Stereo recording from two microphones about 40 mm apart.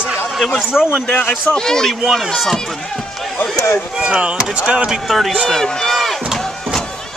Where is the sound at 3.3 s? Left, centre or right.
Left.